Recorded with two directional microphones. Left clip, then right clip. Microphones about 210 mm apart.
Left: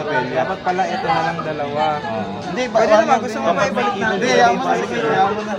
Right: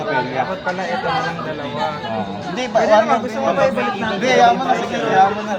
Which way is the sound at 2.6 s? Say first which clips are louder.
Even; 15° right (ahead or behind).